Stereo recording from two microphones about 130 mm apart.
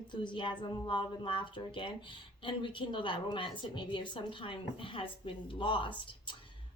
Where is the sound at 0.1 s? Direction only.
35° left (ahead or behind).